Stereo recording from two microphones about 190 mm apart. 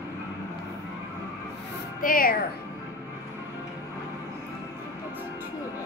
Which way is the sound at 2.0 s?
50° left (ahead or behind).